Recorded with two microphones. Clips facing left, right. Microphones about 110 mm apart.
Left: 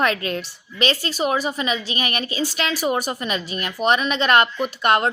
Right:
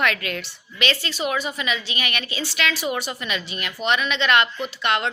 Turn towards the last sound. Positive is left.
turn(degrees=45)  # may be behind; listen again after turning